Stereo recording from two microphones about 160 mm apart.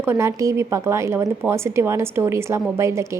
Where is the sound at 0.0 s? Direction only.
15° right (ahead or behind).